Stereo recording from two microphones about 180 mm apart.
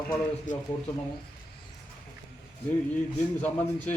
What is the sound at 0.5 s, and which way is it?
Speech, 45° left (ahead or behind).